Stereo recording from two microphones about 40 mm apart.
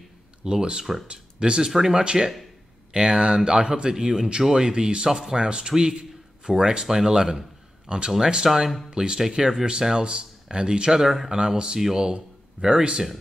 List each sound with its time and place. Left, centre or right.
0.4 s a man's voice: centre
8.9 s speech: centre
11.0 s speech: centre
11.3 s speech: right